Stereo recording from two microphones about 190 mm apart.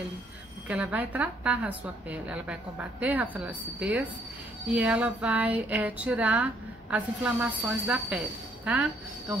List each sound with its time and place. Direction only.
0.7 s speech: 5° right (ahead or behind)